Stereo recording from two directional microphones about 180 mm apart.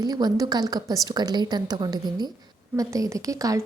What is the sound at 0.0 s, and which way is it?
A woman's voice, 20° right (ahead or behind).